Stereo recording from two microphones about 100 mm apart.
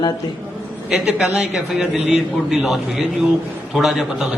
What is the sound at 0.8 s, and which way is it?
A man's voice, 5° right (ahead or behind).